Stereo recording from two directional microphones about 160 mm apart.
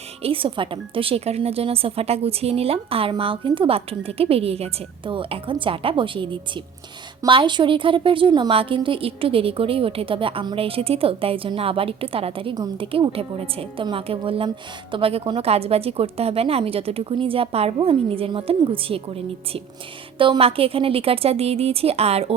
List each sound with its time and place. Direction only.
0.2 s a woman's voice: 35° right (ahead or behind)
20.1 s a woman's voice: 30° right (ahead or behind)